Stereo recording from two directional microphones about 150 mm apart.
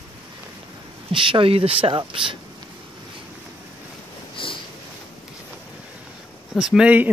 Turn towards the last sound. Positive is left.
turn(degrees=-10)  # may be behind; listen again after turning